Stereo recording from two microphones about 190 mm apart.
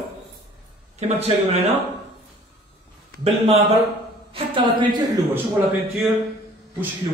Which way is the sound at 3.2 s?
35° right (ahead or behind).